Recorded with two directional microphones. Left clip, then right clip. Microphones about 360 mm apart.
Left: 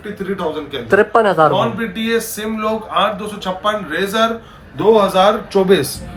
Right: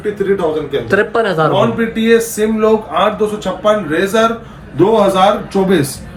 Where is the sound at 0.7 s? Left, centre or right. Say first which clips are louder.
Left 5 dB; centre.